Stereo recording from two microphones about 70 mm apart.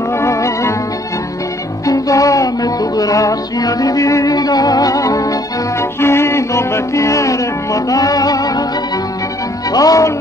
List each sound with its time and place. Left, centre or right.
0.1 s music: left
1.9 s music: left
5.8 s music: left
9.7 s speech: left